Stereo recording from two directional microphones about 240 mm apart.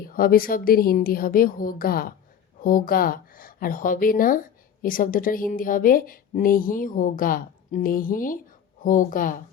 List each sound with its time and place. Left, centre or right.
0.1 s a woman's voice: left